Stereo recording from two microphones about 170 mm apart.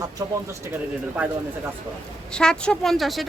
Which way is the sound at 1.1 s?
10° right (ahead or behind).